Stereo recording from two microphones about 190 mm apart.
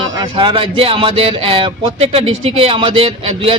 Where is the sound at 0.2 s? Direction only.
25° right (ahead or behind).